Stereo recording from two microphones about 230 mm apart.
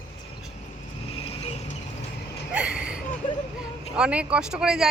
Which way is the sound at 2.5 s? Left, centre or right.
Centre.